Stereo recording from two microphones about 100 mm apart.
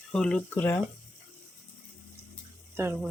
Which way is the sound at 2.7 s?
25° right (ahead or behind).